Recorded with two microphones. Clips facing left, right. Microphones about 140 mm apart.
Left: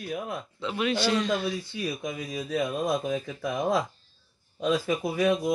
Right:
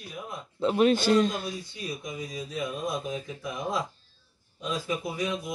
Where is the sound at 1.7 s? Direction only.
70° left (ahead or behind).